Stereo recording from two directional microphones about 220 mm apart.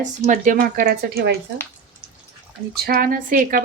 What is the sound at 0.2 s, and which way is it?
Speech, 35° right (ahead or behind).